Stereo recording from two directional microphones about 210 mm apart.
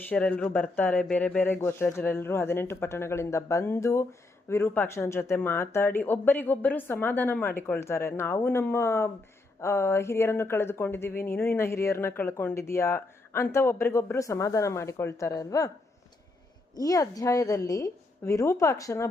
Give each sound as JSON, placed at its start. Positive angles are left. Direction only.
{"t": 0.1, "sound": "speech", "side_deg": 5}
{"t": 16.7, "sound": "speech", "side_deg": 15}